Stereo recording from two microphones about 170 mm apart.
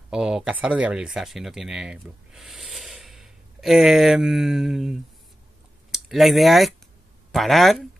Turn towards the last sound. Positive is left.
turn(degrees=0)  # may be behind; listen again after turning